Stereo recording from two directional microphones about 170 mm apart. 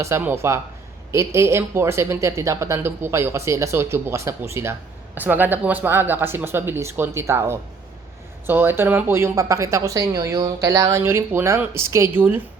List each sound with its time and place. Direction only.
0.0 s speech: 15° right (ahead or behind)